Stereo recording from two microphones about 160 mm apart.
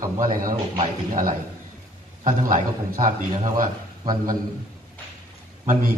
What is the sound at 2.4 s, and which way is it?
A man's voice, 55° right (ahead or behind).